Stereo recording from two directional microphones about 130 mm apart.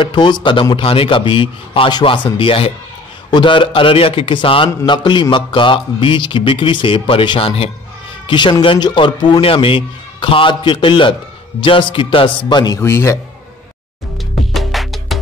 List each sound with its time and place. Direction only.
0.0 s a man's voice: 35° left (ahead or behind)
12.8 s a man's voice: 20° left (ahead or behind)
14.5 s music: centre (ahead or behind)